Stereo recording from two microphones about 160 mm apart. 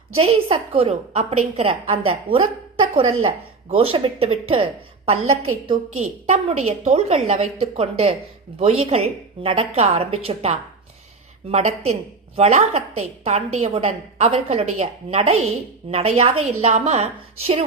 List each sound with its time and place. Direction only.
0.2 s speech: 35° right (ahead or behind)